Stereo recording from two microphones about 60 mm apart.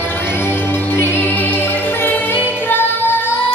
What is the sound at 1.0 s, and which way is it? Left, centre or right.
Music, left.